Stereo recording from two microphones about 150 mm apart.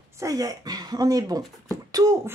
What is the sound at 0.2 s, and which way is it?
Speech, 25° right (ahead or behind).